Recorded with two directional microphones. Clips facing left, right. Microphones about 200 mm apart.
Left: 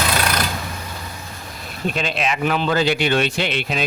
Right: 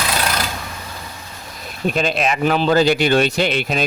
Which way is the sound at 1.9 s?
45° right (ahead or behind).